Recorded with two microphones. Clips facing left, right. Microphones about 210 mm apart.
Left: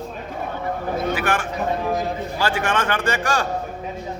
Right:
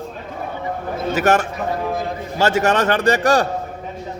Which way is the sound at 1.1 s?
40° right (ahead or behind).